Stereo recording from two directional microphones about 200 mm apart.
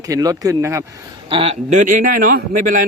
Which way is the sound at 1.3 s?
30° right (ahead or behind).